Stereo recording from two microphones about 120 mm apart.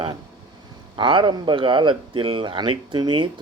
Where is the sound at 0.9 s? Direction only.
40° right (ahead or behind).